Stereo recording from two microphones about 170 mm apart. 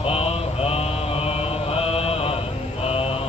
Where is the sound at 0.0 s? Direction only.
35° left (ahead or behind).